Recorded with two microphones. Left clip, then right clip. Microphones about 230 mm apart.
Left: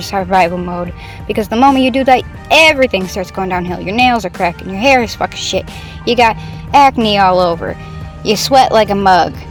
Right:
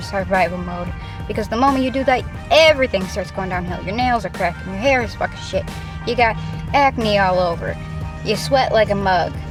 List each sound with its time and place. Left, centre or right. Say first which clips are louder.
0.0 s speech: left 6 dB; left